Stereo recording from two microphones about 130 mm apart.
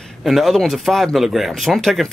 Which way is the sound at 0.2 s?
Centre (ahead or behind).